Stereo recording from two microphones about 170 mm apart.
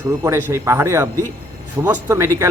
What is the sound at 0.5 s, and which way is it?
Speech, 15° right (ahead or behind).